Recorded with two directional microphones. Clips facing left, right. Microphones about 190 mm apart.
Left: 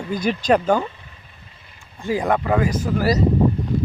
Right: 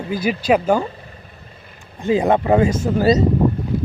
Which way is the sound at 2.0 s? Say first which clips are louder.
Right 4 dB; 25° right (ahead or behind).